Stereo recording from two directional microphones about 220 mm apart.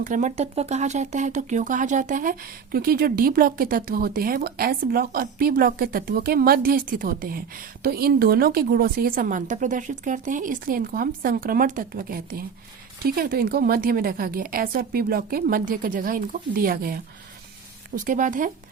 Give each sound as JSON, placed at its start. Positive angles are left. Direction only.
{"t": 0.0, "sound": "speech", "side_deg": -35}